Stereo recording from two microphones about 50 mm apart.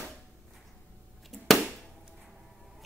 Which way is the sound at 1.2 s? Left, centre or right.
Centre.